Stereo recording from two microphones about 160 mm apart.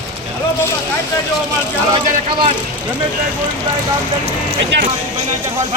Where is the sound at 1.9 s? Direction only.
30° right (ahead or behind).